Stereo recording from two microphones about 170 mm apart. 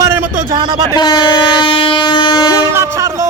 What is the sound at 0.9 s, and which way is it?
Speech, 25° left (ahead or behind).